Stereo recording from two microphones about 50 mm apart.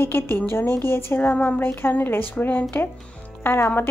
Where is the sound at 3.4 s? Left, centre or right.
Left.